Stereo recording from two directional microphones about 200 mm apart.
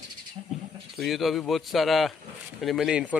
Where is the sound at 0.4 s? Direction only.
25° right (ahead or behind).